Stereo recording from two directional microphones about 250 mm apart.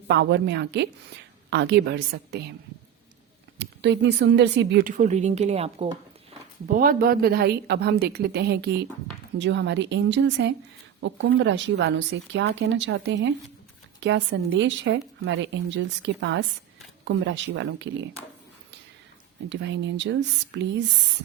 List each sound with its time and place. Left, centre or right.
0.1 s a woman's voice: right
3.6 s speech: right
6.7 s a woman's voice: right
19.5 s a woman's voice: right